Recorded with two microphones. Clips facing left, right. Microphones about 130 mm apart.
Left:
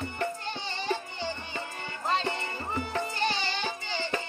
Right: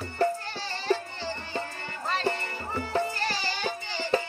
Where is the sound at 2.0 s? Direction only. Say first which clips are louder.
Right 1 dB; 20° left (ahead or behind).